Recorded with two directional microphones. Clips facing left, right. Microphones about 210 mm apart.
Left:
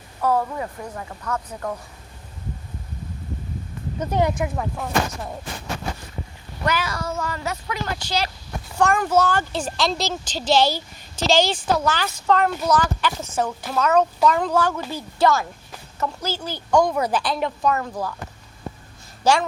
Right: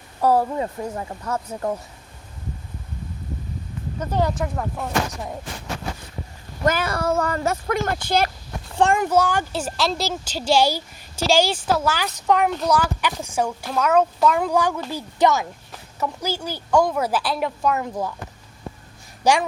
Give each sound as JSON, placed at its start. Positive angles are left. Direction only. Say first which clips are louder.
{"t": 0.2, "sound": "speech", "louder": "right 3 dB", "side_deg": -35}
{"t": 4.1, "sound": "speech", "louder": "left 1 dB", "side_deg": 15}
{"t": 6.7, "sound": "speech", "louder": "right 4 dB", "side_deg": -55}
{"t": 8.8, "sound": "speech", "louder": "right 1 dB", "side_deg": -25}
{"t": 9.0, "sound": "speech", "louder": "even", "side_deg": -15}
{"t": 19.2, "sound": "speech", "louder": "even", "side_deg": -15}